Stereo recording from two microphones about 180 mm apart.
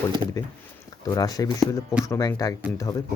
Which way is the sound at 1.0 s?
20° left (ahead or behind).